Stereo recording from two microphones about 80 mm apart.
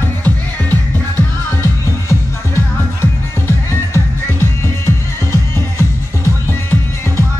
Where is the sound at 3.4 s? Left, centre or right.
Left.